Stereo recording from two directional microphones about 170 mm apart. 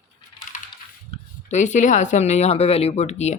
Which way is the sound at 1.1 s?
45° left (ahead or behind).